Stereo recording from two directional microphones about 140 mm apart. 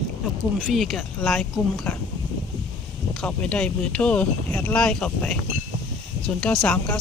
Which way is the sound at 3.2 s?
10° left (ahead or behind).